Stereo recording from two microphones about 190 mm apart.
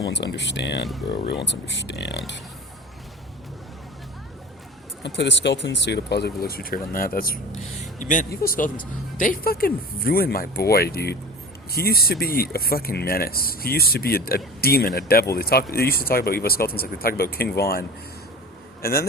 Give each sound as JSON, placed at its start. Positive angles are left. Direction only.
{"t": 0.1, "sound": "speech", "side_deg": 70}
{"t": 5.0, "sound": "a man's voice", "side_deg": 65}